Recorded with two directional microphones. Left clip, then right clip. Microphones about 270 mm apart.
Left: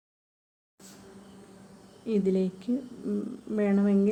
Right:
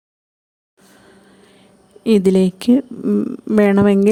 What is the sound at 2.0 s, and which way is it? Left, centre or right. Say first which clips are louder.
Speech: right 14 dB; right.